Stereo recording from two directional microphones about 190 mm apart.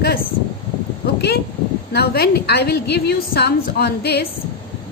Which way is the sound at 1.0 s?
60° left (ahead or behind).